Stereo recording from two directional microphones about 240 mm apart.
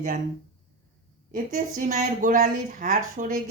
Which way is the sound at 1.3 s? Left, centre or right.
Right.